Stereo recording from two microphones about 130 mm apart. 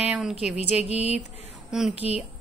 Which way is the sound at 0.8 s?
55° left (ahead or behind).